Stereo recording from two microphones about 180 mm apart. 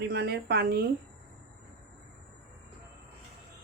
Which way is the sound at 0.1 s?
65° right (ahead or behind).